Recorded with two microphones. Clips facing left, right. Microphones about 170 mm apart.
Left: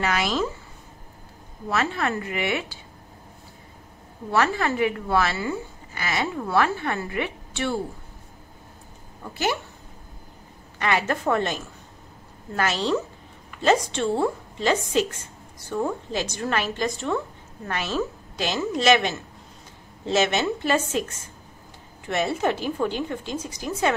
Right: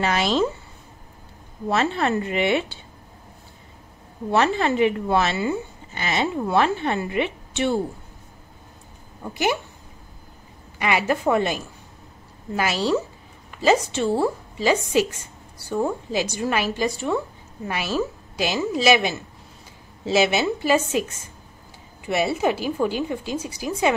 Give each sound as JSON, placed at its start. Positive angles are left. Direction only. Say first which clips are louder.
{"t": 0.0, "sound": "a woman's voice", "louder": "right 3 dB", "side_deg": -30}
{"t": 1.7, "sound": "a woman's voice", "louder": "right 4 dB", "side_deg": -25}
{"t": 4.3, "sound": "a woman's voice", "louder": "right 3 dB", "side_deg": -25}
{"t": 9.2, "sound": "a woman's voice", "louder": "right 3 dB", "side_deg": -15}
{"t": 10.8, "sound": "a woman's voice", "louder": "right 2 dB", "side_deg": -10}